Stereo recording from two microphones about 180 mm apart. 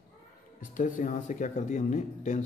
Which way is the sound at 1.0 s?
45° left (ahead or behind).